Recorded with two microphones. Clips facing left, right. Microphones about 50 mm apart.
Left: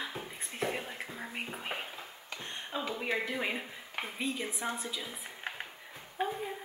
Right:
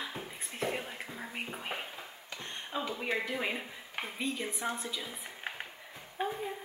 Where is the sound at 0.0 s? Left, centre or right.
Centre.